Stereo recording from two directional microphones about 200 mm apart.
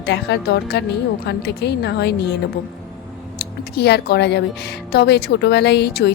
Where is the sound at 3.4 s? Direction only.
55° left (ahead or behind).